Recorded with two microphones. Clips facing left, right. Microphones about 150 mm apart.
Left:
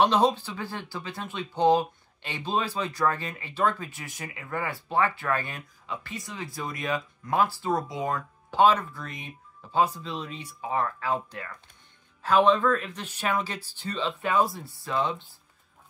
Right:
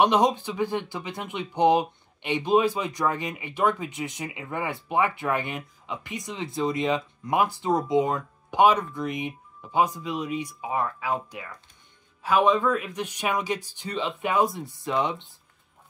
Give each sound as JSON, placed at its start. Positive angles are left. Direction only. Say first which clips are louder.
{"t": 0.0, "sound": "speech", "louder": "right 1 dB", "side_deg": -15}